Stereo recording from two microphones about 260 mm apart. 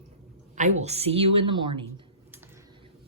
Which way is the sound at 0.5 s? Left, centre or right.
Right.